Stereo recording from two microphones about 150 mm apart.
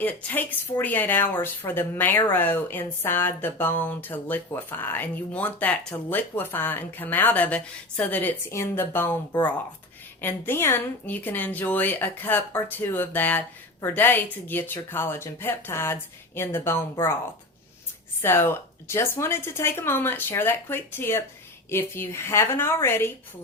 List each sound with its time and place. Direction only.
0.0 s a woman's voice: 10° left (ahead or behind)
10.2 s a woman's voice: 15° left (ahead or behind)
18.2 s a woman's voice: 15° left (ahead or behind)